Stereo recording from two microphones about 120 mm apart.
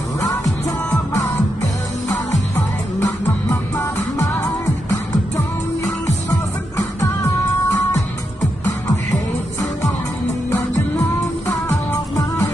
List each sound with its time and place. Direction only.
2.5 s music: 20° left (ahead or behind)